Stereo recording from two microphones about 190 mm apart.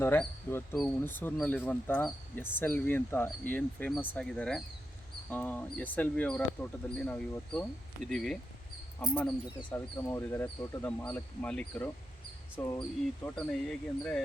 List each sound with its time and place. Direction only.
0.0 s speech: 10° left (ahead or behind)
13.2 s speech: 5° left (ahead or behind)